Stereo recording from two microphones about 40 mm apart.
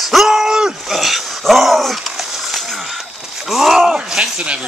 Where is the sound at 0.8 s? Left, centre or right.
Centre.